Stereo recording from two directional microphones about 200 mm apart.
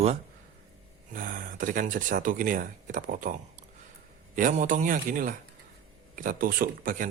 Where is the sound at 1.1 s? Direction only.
45° right (ahead or behind).